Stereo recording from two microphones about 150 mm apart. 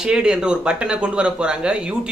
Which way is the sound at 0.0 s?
5° right (ahead or behind).